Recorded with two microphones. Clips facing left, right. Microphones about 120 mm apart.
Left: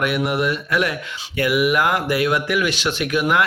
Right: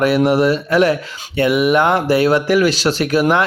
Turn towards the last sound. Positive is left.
turn(degrees=-35)  # may be behind; listen again after turning